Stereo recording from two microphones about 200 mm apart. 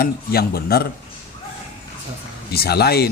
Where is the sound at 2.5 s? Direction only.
50° left (ahead or behind).